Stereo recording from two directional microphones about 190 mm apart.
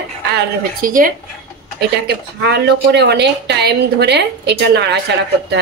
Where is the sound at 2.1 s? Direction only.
60° right (ahead or behind).